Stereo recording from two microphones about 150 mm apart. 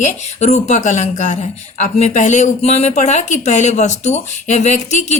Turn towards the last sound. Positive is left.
turn(degrees=50)  # may be behind; listen again after turning